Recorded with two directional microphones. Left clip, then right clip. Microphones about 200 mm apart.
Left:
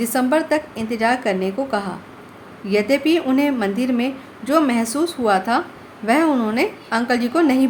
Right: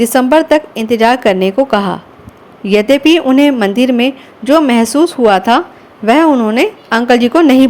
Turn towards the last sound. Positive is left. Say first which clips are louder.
# right 9 dB
turn(degrees=-40)  # may be behind; listen again after turning